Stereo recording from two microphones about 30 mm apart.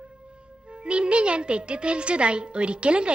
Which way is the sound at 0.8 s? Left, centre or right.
Right.